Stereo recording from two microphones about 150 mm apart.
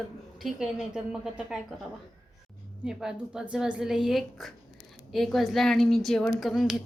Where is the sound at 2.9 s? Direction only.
5° right (ahead or behind).